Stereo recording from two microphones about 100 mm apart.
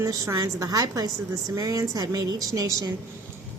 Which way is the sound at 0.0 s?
35° right (ahead or behind).